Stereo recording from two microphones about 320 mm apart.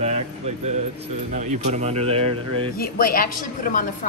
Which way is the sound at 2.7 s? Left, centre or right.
Left.